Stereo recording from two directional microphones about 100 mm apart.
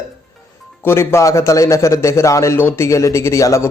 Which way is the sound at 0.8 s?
25° left (ahead or behind).